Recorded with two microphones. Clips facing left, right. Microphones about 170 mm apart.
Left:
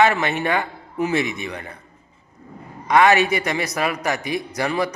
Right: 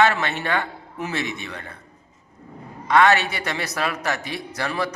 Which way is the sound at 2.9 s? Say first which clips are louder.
Left 2 dB; 15° left (ahead or behind).